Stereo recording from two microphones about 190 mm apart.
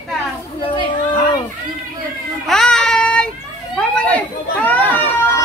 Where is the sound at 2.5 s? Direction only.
5° left (ahead or behind).